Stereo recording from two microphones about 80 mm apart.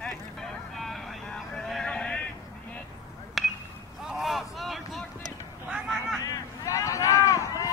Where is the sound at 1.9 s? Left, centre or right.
Centre.